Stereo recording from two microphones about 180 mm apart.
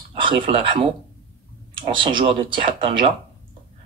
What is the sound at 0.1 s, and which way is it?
Speech, 30° right (ahead or behind).